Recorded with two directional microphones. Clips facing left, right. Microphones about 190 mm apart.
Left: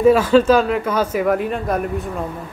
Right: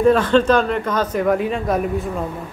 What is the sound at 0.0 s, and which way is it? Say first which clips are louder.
Speech: left 2 dB; 5° left (ahead or behind).